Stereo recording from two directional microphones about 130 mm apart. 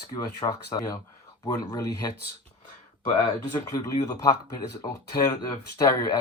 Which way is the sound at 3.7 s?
25° left (ahead or behind).